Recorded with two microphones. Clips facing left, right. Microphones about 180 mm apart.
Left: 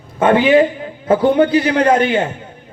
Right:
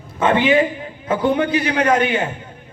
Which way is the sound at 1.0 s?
35° left (ahead or behind).